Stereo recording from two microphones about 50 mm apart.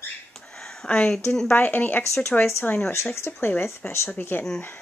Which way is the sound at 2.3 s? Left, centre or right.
Left.